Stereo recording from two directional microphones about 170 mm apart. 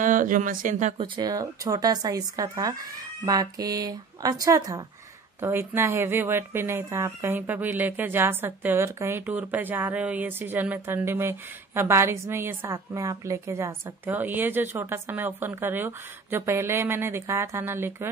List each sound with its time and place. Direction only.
0.0 s speech: 50° right (ahead or behind)
1.0 s speech: 25° right (ahead or behind)